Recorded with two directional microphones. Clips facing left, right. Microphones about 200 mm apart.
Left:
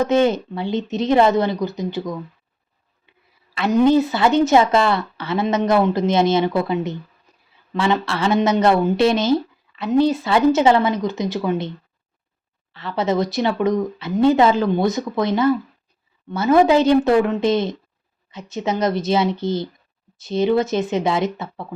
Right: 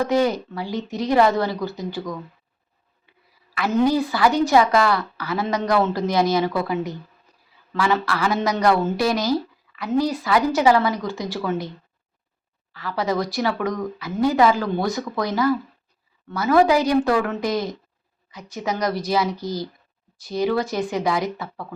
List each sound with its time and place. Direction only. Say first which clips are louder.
0.0 s speech: left 3 dB; 25° left (ahead or behind)
3.5 s speech: left 4 dB; 20° left (ahead or behind)
12.7 s speech: left 3 dB; 25° left (ahead or behind)